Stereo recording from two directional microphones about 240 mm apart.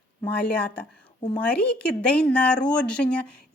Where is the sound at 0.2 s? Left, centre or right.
Centre.